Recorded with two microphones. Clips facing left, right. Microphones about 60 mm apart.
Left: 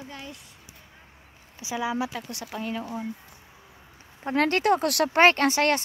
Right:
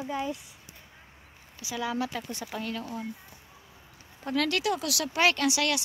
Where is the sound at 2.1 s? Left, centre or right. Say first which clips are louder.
Even; centre.